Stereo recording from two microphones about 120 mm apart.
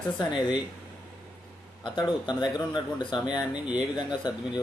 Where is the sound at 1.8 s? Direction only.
40° left (ahead or behind).